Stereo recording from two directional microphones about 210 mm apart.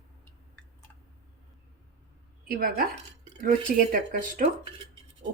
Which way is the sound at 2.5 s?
45° right (ahead or behind).